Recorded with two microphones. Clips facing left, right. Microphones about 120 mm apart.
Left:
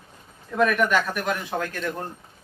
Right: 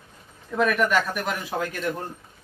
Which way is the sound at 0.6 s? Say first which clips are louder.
Left 1 dB; centre (ahead or behind).